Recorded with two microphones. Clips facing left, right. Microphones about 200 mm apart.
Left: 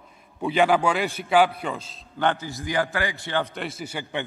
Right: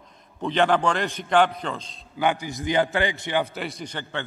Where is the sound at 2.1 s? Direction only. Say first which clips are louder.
Right 1 dB; 10° right (ahead or behind).